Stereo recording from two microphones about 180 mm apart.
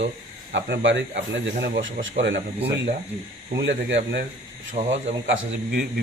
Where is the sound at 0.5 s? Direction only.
85° right.